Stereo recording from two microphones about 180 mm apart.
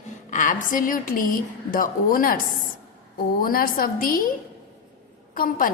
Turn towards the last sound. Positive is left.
turn(degrees=50)  # may be behind; listen again after turning